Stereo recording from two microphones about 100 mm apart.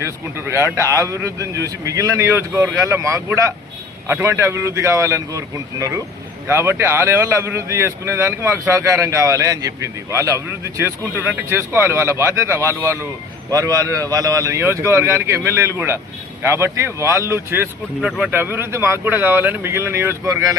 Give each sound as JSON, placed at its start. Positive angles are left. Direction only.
{"t": 0.0, "sound": "speech", "side_deg": -25}
{"t": 6.5, "sound": "speech", "side_deg": -25}
{"t": 18.0, "sound": "speech", "side_deg": -10}
{"t": 18.3, "sound": "speech", "side_deg": -25}
{"t": 20.2, "sound": "speech", "side_deg": -35}